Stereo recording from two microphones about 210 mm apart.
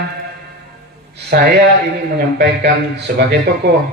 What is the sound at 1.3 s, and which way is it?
Speech, 45° right (ahead or behind).